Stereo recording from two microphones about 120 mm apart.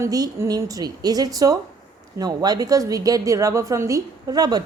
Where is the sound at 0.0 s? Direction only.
25° right (ahead or behind).